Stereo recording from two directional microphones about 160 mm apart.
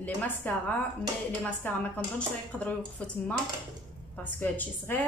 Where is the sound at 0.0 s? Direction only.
10° left (ahead or behind).